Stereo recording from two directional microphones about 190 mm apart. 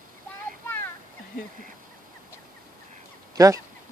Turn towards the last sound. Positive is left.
turn(degrees=-15)  # may be behind; listen again after turning